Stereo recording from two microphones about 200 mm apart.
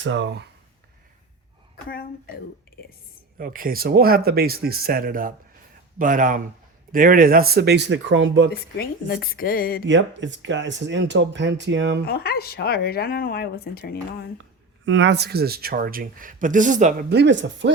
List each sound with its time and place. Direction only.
0.0 s speech: 65° right (ahead or behind)
1.7 s speech: 45° left (ahead or behind)
3.3 s speech: 45° right (ahead or behind); by 8.4 s 70° right (ahead or behind)
8.8 s speech: 50° left (ahead or behind)
9.8 s speech: 65° right (ahead or behind)
12.0 s speech: 50° left (ahead or behind)
14.8 s speech: 65° right (ahead or behind); by 17.1 s 40° right (ahead or behind)
17.1 s speech: 60° right (ahead or behind)